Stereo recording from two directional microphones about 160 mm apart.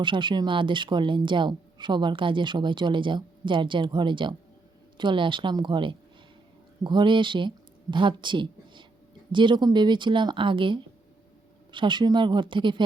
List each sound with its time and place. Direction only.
0.0 s a woman's voice: 30° right (ahead or behind)